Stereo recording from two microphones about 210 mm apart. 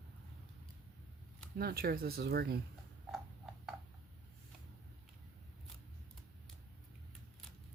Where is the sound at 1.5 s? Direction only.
45° right (ahead or behind).